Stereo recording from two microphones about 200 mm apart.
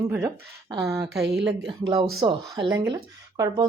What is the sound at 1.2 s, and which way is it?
Speech, 60° right (ahead or behind).